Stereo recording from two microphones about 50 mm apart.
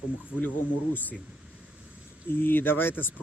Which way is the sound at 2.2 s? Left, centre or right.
Left.